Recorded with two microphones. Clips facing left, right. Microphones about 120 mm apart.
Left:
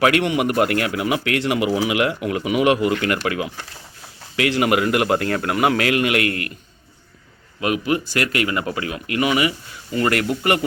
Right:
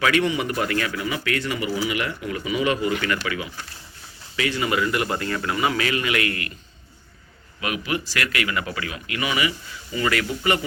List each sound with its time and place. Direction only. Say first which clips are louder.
0.0 s speech: left 4 dB; 65° left (ahead or behind)
4.4 s a man's voice: left 5 dB; 85° left; by 6.5 s 50° left (ahead or behind)
7.6 s a man's voice: left 6 dB; 45° left (ahead or behind)